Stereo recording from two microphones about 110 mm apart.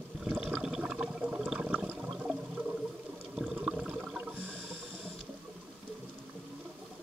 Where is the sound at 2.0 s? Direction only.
5° right (ahead or behind).